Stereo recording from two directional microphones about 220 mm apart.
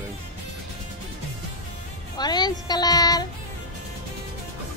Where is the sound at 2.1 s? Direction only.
20° left (ahead or behind).